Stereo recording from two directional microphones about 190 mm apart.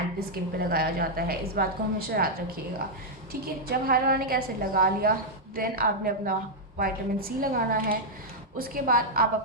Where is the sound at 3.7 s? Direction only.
50° right (ahead or behind).